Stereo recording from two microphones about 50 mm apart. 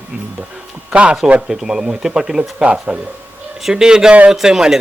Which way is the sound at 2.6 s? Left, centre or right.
Right.